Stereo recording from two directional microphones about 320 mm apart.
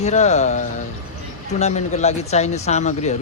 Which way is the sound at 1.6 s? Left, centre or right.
Left.